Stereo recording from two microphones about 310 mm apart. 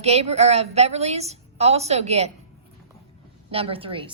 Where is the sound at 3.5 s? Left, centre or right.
Centre.